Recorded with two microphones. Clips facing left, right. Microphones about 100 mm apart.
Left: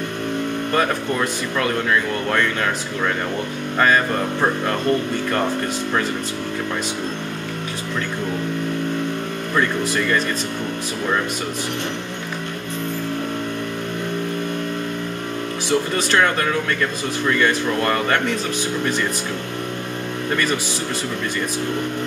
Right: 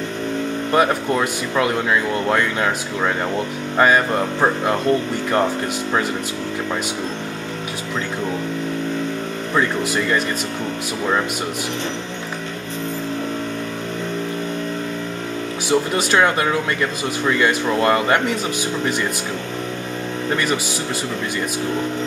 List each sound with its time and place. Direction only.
0.7 s speech: 15° right (ahead or behind)
9.6 s speech: 15° right (ahead or behind)
15.7 s speech: 10° right (ahead or behind)